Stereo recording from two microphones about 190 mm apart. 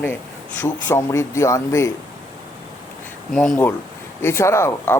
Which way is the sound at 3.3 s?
5° left (ahead or behind).